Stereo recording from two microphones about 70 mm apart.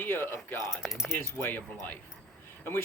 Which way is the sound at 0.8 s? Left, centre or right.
Centre.